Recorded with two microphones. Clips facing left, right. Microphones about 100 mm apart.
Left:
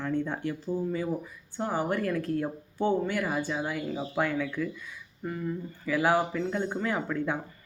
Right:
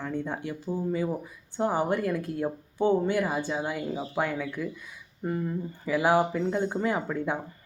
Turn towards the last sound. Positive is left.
turn(degrees=-15)  # may be behind; listen again after turning